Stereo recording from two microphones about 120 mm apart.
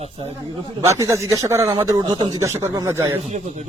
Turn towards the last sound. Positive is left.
turn(degrees=-75)  # may be behind; listen again after turning